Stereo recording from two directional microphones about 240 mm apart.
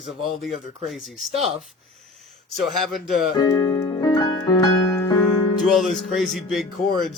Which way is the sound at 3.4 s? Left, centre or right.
Centre.